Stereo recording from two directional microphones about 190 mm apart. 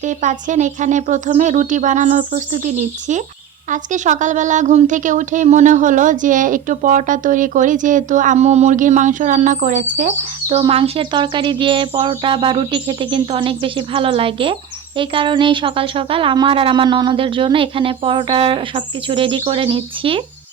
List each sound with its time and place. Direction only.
0.0 s speech: 40° right (ahead or behind)